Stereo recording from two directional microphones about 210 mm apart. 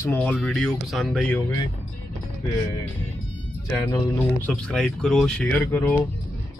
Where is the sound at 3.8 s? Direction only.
10° left (ahead or behind).